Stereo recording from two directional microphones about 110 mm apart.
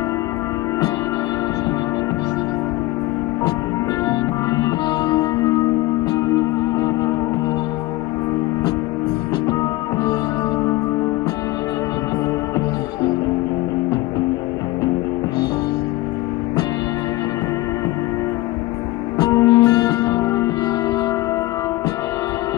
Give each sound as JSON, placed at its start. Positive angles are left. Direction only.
{"t": 4.1, "sound": "music", "side_deg": 30}
{"t": 9.5, "sound": "music", "side_deg": 35}
{"t": 19.1, "sound": "music", "side_deg": 35}